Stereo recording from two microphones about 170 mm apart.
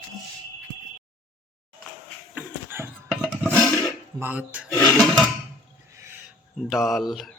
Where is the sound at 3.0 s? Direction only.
Centre (ahead or behind).